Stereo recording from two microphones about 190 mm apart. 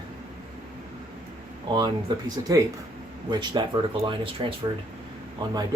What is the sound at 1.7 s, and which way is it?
Speech, 20° right (ahead or behind).